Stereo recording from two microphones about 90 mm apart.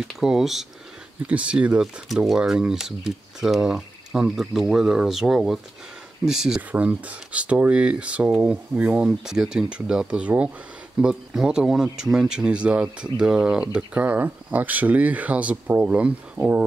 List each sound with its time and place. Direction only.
0.1 s speech: 5° right (ahead or behind)
1.2 s speech: 15° right (ahead or behind)
16.4 s speech: 30° right (ahead or behind)